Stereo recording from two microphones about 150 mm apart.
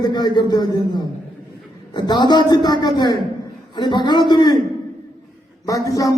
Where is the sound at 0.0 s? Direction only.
30° left (ahead or behind).